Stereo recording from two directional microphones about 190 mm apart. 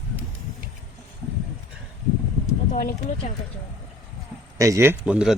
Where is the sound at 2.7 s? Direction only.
45° left (ahead or behind).